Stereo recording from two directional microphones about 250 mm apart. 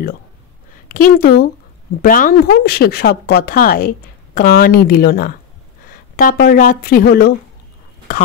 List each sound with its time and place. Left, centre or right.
0.8 s speech: left